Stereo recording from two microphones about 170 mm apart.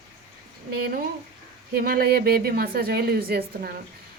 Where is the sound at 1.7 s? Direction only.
60° right (ahead or behind).